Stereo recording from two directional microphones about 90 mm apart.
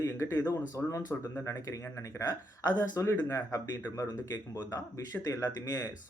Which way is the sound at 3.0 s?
30° left (ahead or behind).